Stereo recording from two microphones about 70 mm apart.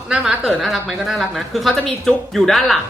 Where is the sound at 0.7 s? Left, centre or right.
Centre.